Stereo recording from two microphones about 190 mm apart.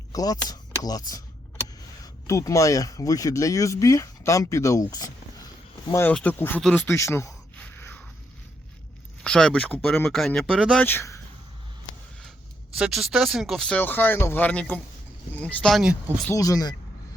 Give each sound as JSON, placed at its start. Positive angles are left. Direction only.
{"t": 0.1, "sound": "speech", "side_deg": 20}
{"t": 2.2, "sound": "speech", "side_deg": 15}
{"t": 6.8, "sound": "a sound", "side_deg": 15}
{"t": 9.2, "sound": "speech", "side_deg": 5}
{"t": 10.8, "sound": "speech", "side_deg": 15}
{"t": 12.7, "sound": "speech", "side_deg": -5}
{"t": 16.3, "sound": "speech", "side_deg": 20}